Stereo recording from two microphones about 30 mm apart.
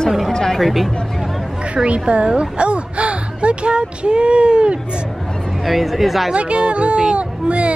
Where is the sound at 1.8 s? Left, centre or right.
Right.